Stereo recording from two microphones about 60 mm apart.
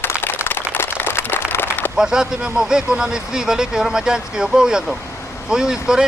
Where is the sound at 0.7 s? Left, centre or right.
Left.